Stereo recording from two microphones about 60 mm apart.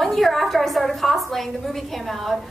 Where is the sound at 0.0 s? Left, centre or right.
Centre.